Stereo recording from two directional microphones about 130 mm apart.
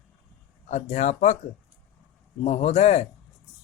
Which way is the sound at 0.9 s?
65° left (ahead or behind).